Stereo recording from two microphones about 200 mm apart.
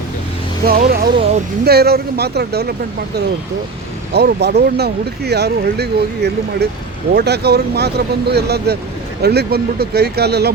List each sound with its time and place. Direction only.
0.6 s speech: 45° right (ahead or behind)
4.1 s speech: 55° right (ahead or behind)